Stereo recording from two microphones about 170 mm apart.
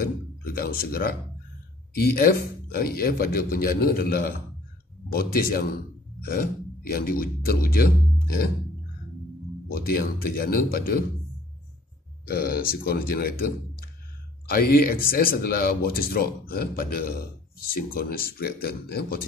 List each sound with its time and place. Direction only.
0.4 s speech: 60° left (ahead or behind)
9.7 s speech: 60° left (ahead or behind)
12.3 s speech: 60° left (ahead or behind)
14.5 s speech: 60° left (ahead or behind)